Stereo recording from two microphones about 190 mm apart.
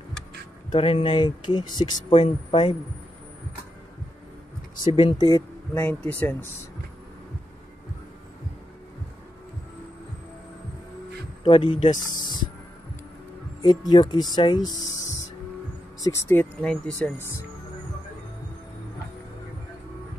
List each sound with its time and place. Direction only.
0.7 s speech: 30° left (ahead or behind)
4.8 s speech: 25° left (ahead or behind); by 6.6 s 10° left (ahead or behind)
11.4 s speech: 25° left (ahead or behind)
13.6 s speech: 20° left (ahead or behind)
16.0 s speech: 15° left (ahead or behind)